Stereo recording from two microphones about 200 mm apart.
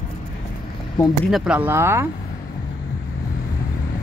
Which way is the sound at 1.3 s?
5° right (ahead or behind).